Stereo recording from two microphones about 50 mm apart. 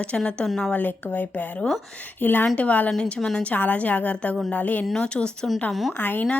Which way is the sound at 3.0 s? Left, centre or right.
Centre.